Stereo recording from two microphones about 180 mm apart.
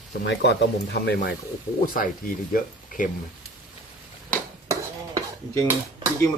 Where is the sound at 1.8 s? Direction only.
50° left (ahead or behind).